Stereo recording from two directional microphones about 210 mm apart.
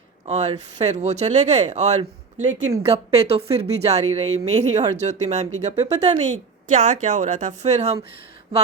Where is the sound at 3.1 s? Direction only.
30° right (ahead or behind).